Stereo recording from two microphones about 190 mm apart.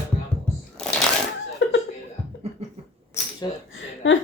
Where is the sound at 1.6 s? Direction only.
65° left (ahead or behind).